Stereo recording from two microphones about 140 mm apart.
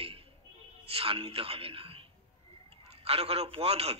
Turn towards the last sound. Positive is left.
turn(degrees=-45)  # may be behind; listen again after turning